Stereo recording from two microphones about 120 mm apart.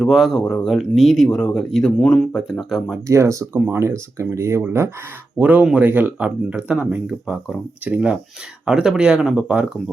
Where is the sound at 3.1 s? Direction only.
25° right (ahead or behind).